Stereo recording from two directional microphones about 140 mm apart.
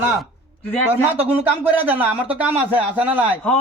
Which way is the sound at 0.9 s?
15° right (ahead or behind).